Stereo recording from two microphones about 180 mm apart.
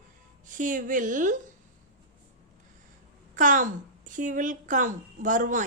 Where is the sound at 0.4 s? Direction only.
45° right (ahead or behind).